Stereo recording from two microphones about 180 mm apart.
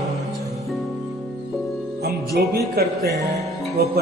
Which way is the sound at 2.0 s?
60° right (ahead or behind).